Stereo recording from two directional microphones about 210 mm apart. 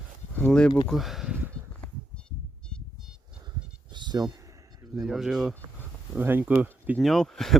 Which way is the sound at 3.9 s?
20° right (ahead or behind).